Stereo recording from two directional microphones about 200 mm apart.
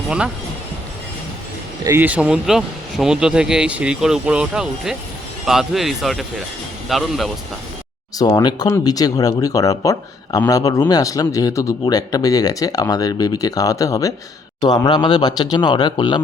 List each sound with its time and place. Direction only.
1.8 s speech: 10° right (ahead or behind)
8.2 s speech: 20° left (ahead or behind)